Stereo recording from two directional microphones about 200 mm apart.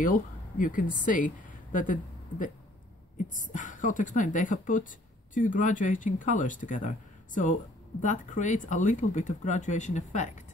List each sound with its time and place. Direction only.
0.0 s speech: 40° left (ahead or behind)